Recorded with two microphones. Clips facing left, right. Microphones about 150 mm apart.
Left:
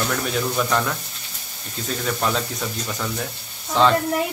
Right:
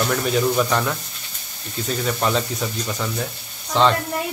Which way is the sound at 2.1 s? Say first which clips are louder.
Right 1 dB; 5° right (ahead or behind).